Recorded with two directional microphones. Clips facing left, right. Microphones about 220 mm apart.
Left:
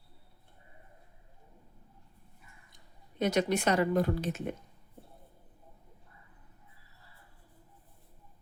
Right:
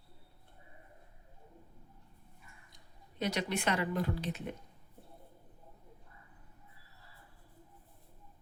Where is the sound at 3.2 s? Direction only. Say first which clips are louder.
Left 6 dB; 45° left (ahead or behind).